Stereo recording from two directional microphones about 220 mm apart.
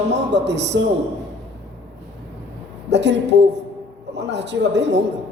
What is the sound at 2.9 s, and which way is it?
A man's voice, 50° right (ahead or behind).